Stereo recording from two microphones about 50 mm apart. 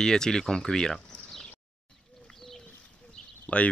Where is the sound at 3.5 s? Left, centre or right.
Left.